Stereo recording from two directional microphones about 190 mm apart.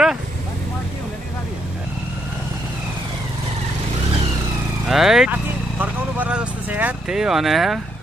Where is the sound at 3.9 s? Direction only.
30° right (ahead or behind).